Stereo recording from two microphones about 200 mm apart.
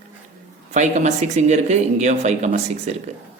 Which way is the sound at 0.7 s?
35° right (ahead or behind).